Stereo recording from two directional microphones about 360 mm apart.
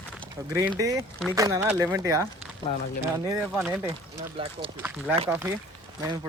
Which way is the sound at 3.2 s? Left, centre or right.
Centre.